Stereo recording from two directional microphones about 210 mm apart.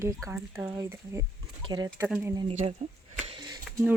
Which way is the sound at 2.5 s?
35° right (ahead or behind).